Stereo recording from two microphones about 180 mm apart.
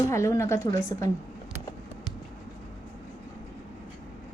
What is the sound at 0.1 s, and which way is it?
Speech, 15° left (ahead or behind).